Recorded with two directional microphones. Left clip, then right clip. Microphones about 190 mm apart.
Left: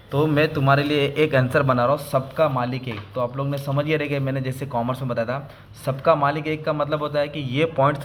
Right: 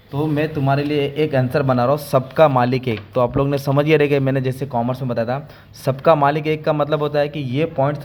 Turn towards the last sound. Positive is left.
turn(degrees=-20)  # may be behind; listen again after turning